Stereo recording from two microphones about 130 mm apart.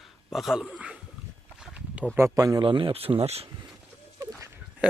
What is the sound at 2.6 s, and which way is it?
Speech, 40° right (ahead or behind).